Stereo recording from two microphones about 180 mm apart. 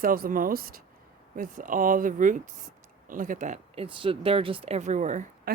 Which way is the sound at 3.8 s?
30° right (ahead or behind).